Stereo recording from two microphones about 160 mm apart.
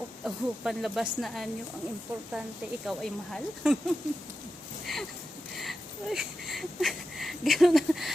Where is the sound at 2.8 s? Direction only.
5° left (ahead or behind).